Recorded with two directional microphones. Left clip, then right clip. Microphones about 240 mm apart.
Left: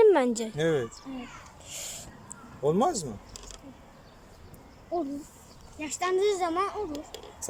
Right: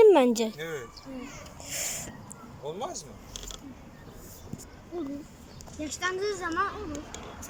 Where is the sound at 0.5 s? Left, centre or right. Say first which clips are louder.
Left 9 dB; left.